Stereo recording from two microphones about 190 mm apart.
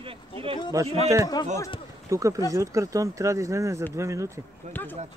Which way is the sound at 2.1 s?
15° right (ahead or behind).